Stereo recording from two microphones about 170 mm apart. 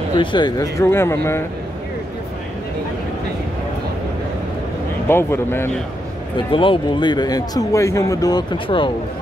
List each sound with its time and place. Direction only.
0.2 s speech: 25° left (ahead or behind)
5.0 s speech: 15° left (ahead or behind)
6.3 s a man's voice: 30° left (ahead or behind)